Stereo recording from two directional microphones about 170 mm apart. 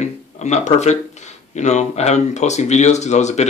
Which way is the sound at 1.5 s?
45° left (ahead or behind).